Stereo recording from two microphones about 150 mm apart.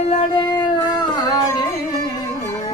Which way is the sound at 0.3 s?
30° left (ahead or behind).